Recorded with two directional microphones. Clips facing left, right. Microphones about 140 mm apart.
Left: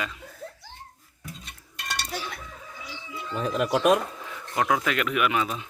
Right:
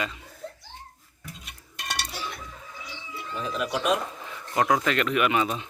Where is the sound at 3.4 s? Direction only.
45° left (ahead or behind).